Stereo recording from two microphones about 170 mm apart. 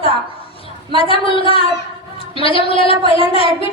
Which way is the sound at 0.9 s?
30° left (ahead or behind).